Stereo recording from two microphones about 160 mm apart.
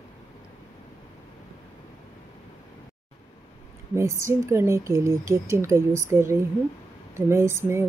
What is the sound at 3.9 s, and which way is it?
Speech, 15° right (ahead or behind).